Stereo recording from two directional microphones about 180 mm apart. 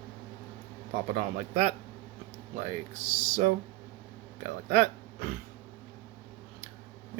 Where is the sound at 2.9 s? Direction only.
40° right (ahead or behind).